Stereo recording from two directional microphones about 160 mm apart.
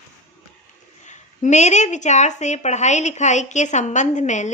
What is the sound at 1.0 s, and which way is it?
A woman's voice, 50° left (ahead or behind).